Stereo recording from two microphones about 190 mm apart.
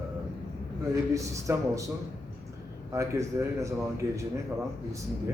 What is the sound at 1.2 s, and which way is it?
Speech, 15° right (ahead or behind).